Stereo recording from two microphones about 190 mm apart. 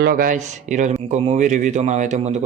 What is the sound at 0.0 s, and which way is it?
Speech, 50° right (ahead or behind).